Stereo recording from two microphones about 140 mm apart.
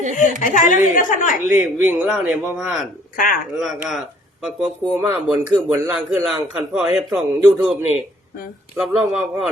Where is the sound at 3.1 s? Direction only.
90° left.